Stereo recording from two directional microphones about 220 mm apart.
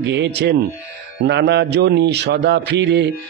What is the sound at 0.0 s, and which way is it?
Speech, 50° right (ahead or behind).